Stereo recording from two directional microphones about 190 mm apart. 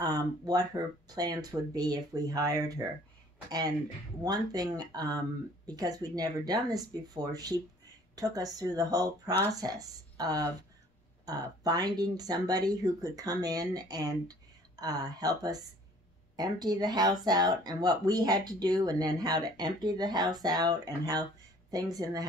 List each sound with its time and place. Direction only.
0.0 s speech: 20° right (ahead or behind)